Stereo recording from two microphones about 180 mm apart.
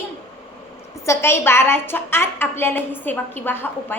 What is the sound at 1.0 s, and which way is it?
A woman's voice, 15° left (ahead or behind).